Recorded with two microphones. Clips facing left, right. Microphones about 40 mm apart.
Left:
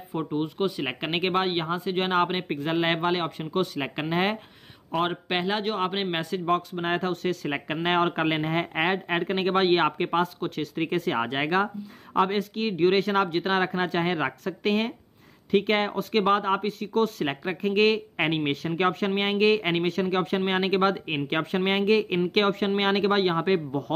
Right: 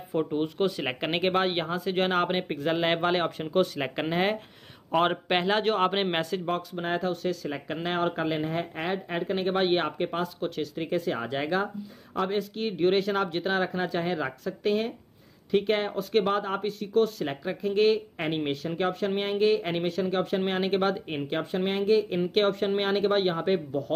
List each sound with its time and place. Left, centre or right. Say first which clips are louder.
0.3 s speech: even; centre
3.0 s speech: even; centre
4.9 s speech: right 2 dB; centre
6.3 s speech: left 4 dB; centre
6.7 s speech: left 2 dB; left
12.4 s speech: left 3 dB; left
17.6 s speech: left 1 dB; left
22.3 s speech: right 1 dB; left